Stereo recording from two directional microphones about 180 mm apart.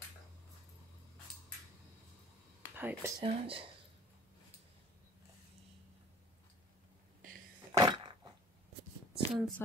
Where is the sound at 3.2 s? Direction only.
30° right (ahead or behind).